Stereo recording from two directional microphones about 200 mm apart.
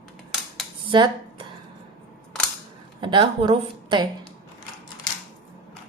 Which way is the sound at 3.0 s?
25° right (ahead or behind).